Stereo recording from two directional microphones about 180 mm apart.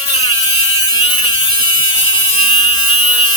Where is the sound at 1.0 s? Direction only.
25° left (ahead or behind).